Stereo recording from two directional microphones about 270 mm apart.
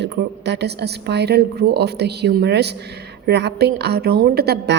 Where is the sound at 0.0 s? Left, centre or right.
Right.